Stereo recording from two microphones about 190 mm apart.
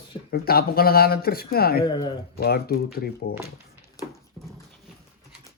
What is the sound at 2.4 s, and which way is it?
Speech, 55° left (ahead or behind).